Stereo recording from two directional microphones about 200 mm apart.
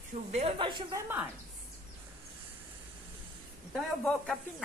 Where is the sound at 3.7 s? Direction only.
5° left (ahead or behind).